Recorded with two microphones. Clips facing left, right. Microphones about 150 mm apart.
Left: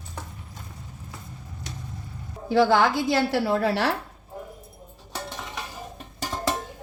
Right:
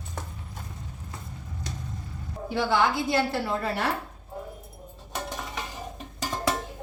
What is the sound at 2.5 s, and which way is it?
A woman's voice, 90° left.